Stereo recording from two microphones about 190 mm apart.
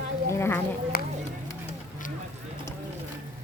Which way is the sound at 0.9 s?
55° left (ahead or behind).